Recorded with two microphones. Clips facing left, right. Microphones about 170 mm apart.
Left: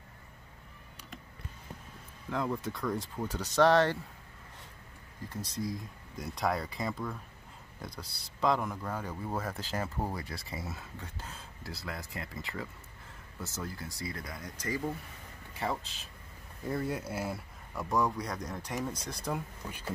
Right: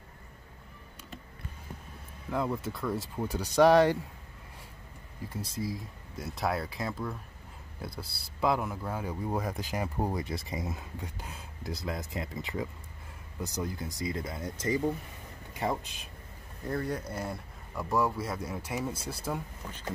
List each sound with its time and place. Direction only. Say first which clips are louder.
2.3 s speech: right 2 dB; 5° right (ahead or behind)
5.3 s speech: right 1 dB; 10° right (ahead or behind)
16.6 s speech: right 1 dB; 5° left (ahead or behind)